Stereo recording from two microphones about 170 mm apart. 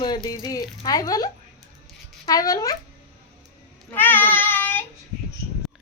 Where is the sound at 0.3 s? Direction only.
20° left (ahead or behind).